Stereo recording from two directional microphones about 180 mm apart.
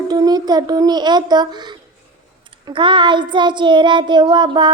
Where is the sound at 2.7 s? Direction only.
25° right (ahead or behind).